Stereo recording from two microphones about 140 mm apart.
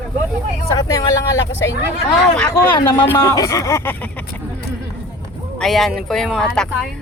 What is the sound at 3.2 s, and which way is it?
Speech, 25° left (ahead or behind).